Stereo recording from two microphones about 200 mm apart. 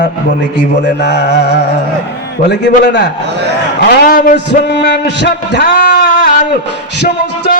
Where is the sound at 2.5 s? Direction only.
60° left (ahead or behind).